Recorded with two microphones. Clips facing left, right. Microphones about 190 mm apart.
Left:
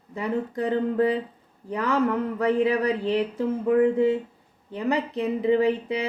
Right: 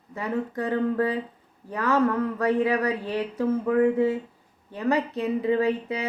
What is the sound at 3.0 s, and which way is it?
Speech, 20° left (ahead or behind).